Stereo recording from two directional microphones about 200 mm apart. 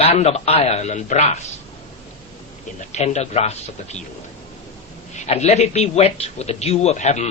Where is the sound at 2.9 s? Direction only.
35° left (ahead or behind).